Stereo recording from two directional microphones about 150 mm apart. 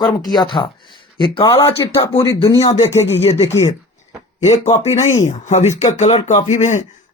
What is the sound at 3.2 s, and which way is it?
Speech, 45° left (ahead or behind).